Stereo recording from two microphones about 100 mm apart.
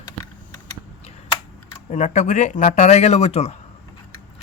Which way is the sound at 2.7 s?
90° left.